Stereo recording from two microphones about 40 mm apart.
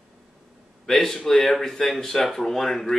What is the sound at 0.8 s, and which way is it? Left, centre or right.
Speech, centre.